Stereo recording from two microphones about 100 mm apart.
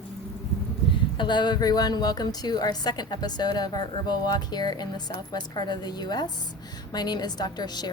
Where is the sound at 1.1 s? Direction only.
50° left (ahead or behind).